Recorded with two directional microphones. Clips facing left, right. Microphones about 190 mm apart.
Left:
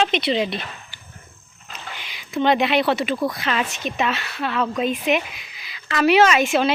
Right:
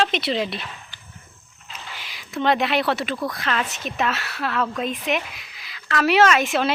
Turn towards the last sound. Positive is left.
turn(degrees=0)  # may be behind; listen again after turning